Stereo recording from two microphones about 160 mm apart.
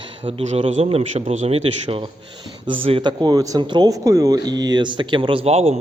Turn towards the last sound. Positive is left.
turn(degrees=-40)  # may be behind; listen again after turning